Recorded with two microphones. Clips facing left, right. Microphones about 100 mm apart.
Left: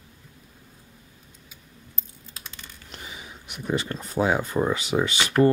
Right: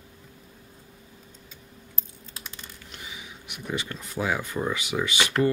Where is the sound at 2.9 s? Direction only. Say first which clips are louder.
Left 2 dB; 40° left (ahead or behind).